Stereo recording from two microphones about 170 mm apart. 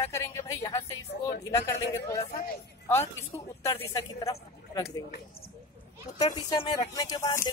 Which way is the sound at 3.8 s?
20° left (ahead or behind).